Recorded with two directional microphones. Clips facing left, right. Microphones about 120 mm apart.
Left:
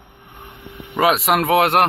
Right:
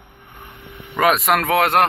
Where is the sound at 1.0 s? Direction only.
5° left (ahead or behind).